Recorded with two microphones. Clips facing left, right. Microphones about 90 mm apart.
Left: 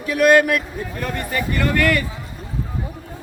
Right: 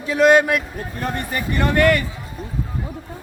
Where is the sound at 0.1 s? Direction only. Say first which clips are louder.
Even; 25° right (ahead or behind).